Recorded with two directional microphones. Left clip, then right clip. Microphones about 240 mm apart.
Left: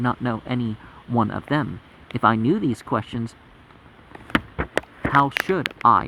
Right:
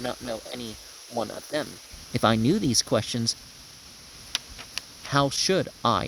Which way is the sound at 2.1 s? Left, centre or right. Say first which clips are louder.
Left 4 dB; right.